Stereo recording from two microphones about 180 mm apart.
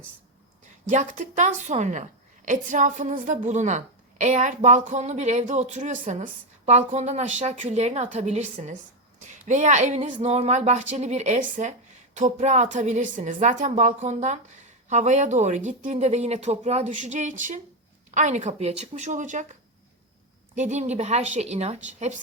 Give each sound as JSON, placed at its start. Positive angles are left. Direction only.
{"t": 0.9, "sound": "a woman's voice", "side_deg": -45}
{"t": 20.6, "sound": "a woman's voice", "side_deg": -40}